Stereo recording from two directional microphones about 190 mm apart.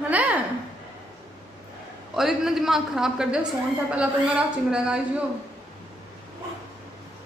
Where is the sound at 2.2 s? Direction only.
Centre (ahead or behind).